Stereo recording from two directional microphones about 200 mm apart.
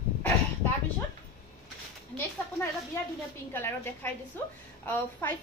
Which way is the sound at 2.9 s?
10° left (ahead or behind).